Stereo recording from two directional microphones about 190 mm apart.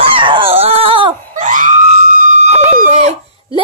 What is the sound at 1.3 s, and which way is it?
Screaming, 40° right (ahead or behind).